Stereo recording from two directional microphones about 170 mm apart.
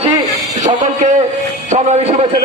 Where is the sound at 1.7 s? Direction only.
40° right (ahead or behind).